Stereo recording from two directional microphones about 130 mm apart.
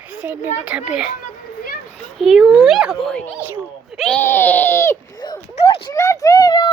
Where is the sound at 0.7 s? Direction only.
10° right (ahead or behind).